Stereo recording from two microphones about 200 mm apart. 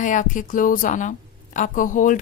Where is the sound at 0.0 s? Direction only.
40° left (ahead or behind).